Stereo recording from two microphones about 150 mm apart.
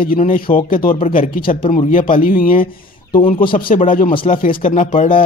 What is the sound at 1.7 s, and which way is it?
A man's voice, 60° left (ahead or behind).